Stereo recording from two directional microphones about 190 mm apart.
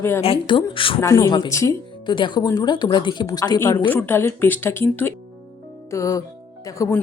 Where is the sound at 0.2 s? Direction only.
30° left (ahead or behind).